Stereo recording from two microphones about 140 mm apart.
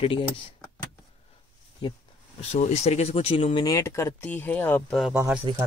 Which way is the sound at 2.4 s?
50° left (ahead or behind).